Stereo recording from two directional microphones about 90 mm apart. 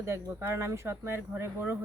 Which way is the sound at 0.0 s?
30° right (ahead or behind).